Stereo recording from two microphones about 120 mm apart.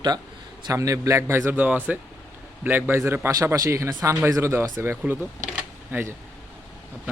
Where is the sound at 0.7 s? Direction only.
25° right (ahead or behind).